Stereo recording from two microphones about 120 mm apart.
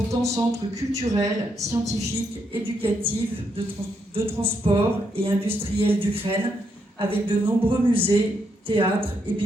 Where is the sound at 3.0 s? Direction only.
50° right (ahead or behind).